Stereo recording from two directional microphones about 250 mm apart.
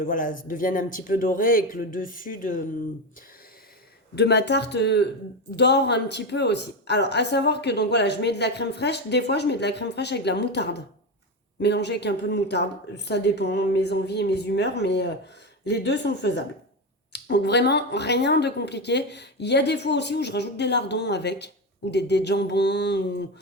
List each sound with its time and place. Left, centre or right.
0.0 s speech: left
4.1 s speech: left